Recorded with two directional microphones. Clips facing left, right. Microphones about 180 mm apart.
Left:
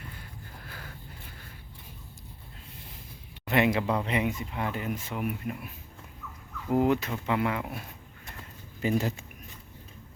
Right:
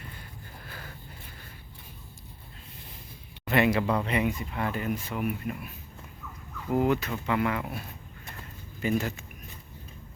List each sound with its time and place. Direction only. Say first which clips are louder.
3.5 s speech: right 1 dB; 20° left (ahead or behind)
6.7 s speech: left 1 dB; 25° left (ahead or behind)
8.8 s speech: left 1 dB; 30° left (ahead or behind)